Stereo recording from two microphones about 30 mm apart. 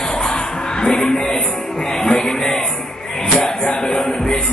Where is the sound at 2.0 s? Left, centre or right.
Left.